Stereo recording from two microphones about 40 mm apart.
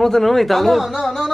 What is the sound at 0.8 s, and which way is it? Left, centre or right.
Speech, centre.